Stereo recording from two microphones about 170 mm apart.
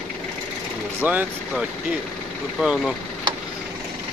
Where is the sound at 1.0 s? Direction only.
10° right (ahead or behind).